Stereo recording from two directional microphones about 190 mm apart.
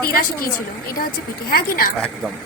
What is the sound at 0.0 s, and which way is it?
A woman's voice, 50° left (ahead or behind).